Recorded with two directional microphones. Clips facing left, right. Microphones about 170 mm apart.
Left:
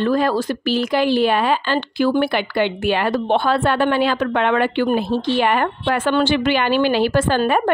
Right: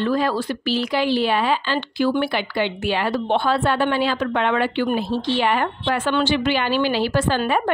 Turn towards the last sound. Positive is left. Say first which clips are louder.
# left 3 dB
turn(degrees=55)  # may be behind; listen again after turning